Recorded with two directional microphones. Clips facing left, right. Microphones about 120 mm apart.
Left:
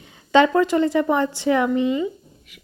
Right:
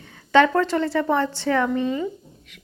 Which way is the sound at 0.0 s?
15° left (ahead or behind).